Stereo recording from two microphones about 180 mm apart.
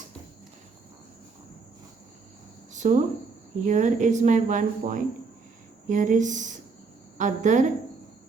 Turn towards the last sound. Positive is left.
turn(degrees=-45)  # may be behind; listen again after turning